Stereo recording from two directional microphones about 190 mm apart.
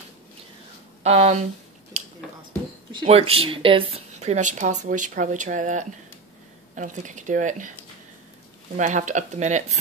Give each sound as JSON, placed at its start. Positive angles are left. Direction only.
{"t": 1.0, "sound": "a woman's voice", "side_deg": -35}
{"t": 2.0, "sound": "a sound", "side_deg": -35}
{"t": 2.9, "sound": "a woman's voice", "side_deg": -30}
{"t": 8.7, "sound": "a woman's voice", "side_deg": -40}